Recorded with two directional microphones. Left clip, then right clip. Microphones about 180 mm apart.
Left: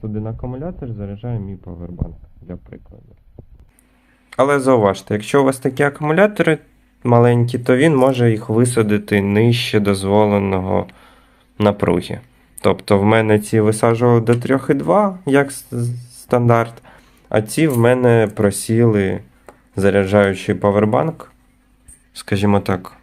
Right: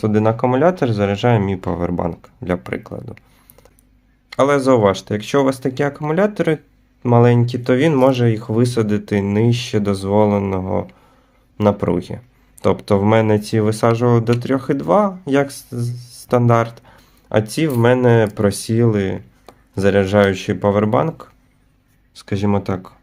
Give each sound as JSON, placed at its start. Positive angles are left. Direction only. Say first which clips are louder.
{"t": 0.0, "sound": "speech", "louder": "right 13 dB", "side_deg": -15}
{"t": 4.3, "sound": "speech", "louder": "even", "side_deg": 0}